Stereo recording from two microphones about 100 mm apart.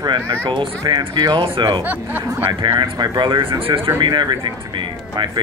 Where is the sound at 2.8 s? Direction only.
50° right (ahead or behind).